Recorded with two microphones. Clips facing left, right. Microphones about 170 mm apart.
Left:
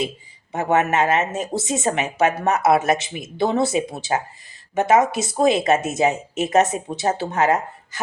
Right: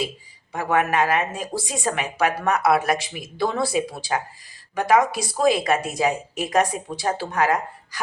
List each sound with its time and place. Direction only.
0.5 s speech: 25° left (ahead or behind)